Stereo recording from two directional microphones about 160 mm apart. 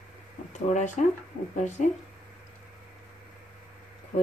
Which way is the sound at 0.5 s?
50° left (ahead or behind).